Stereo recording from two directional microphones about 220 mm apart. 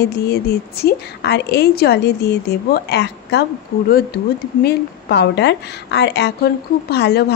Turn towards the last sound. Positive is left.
turn(degrees=50)  # may be behind; listen again after turning